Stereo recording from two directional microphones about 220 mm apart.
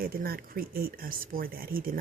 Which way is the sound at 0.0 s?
45° right (ahead or behind).